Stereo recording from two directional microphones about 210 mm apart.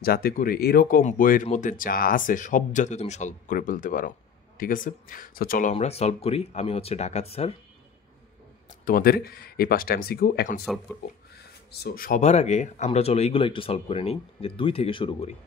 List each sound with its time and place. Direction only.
0.0 s speech: 45° left (ahead or behind); by 7.5 s 30° left (ahead or behind)
8.6 s speech: 40° left (ahead or behind)
11.8 s speech: 45° left (ahead or behind); by 15.3 s 30° left (ahead or behind)